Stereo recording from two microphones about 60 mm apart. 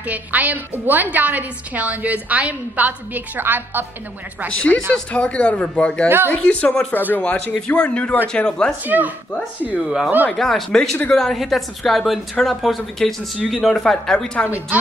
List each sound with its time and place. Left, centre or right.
0.0 s a woman's voice: right
4.5 s speech: centre
6.0 s speech: right
6.3 s speech: left
8.8 s a woman's voice: right
9.8 s a woman's voice: centre
10.3 s a woman's voice: centre